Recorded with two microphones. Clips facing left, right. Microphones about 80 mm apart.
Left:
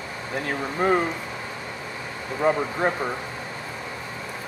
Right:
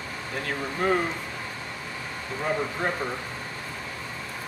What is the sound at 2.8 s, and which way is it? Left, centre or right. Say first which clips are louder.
Speech: left 7 dB; centre.